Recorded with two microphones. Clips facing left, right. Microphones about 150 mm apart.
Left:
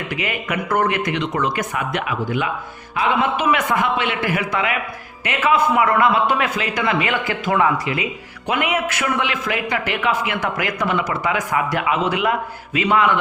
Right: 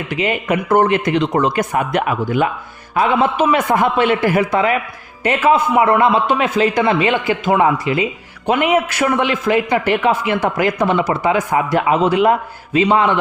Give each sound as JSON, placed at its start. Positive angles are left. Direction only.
{"t": 0.2, "sound": "a man's voice", "side_deg": -30}